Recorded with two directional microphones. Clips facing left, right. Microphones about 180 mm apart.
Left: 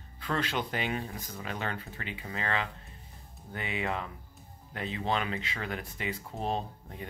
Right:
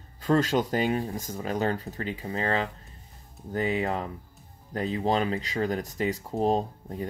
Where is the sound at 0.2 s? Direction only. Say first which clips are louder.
Right 9 dB; 45° right (ahead or behind).